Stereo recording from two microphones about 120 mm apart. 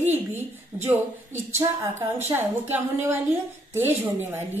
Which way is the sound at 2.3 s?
20° right (ahead or behind).